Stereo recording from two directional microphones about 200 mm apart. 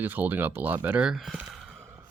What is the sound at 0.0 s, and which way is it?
Speech, 10° right (ahead or behind).